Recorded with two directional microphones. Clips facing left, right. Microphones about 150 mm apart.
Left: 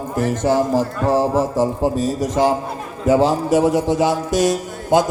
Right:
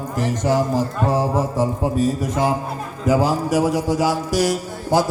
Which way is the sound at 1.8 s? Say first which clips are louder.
Left 1 dB; 30° left (ahead or behind).